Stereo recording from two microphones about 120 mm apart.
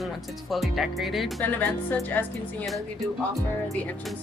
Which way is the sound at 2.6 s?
Centre (ahead or behind).